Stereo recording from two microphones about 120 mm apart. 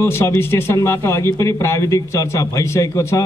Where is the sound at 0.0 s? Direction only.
20° left (ahead or behind).